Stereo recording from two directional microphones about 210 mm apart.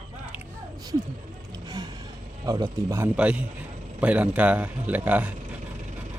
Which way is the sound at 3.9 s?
5° right (ahead or behind).